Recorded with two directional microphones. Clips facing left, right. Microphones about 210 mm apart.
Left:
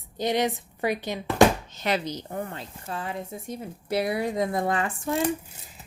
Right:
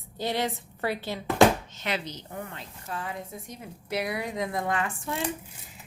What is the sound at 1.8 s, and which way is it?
A woman's voice, 40° left (ahead or behind).